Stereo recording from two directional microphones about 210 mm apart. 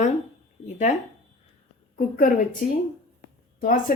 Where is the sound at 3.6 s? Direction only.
40° left (ahead or behind).